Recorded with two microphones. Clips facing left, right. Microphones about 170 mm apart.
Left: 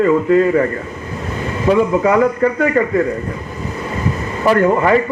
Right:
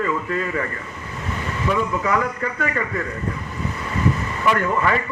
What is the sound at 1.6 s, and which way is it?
A man's voice, 40° left (ahead or behind).